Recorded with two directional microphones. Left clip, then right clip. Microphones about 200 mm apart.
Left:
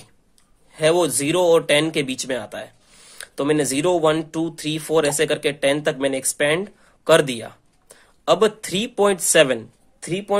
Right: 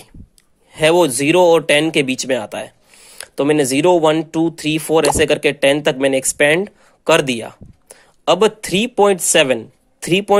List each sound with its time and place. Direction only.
0.7 s speech: 35° right (ahead or behind)
10.0 s speech: 35° right (ahead or behind)